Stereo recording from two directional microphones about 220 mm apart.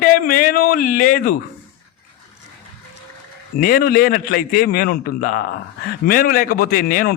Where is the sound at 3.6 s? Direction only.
40° left (ahead or behind).